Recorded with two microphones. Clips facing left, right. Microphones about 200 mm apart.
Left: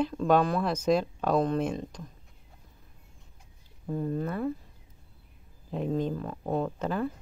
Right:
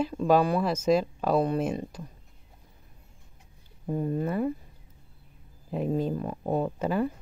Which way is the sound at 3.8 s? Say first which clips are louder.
Right 2 dB; 15° right (ahead or behind).